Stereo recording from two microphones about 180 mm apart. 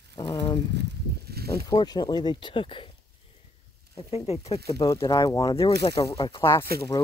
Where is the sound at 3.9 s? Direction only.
35° left (ahead or behind).